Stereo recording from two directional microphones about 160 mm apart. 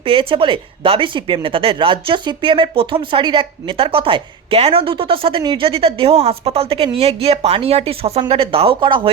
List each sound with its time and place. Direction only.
0.0 s speech: 35° right (ahead or behind)